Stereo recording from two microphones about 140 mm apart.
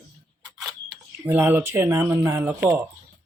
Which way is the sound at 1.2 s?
15° right (ahead or behind).